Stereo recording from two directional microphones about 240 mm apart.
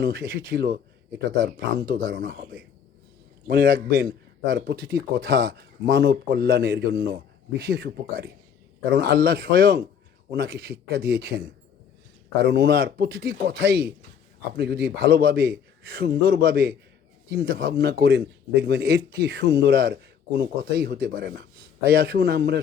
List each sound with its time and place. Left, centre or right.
0.0 s speech: right